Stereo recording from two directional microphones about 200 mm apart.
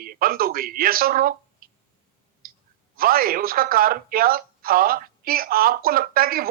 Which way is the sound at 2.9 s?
45° right (ahead or behind).